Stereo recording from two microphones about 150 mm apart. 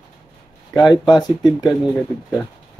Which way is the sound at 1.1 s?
30° left (ahead or behind).